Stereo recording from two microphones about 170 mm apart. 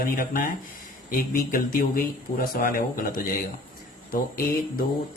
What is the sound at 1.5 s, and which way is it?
Speech, 55° left (ahead or behind).